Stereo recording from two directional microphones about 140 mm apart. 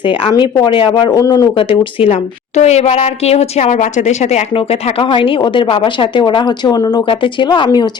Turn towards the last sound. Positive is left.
turn(degrees=35)  # may be behind; listen again after turning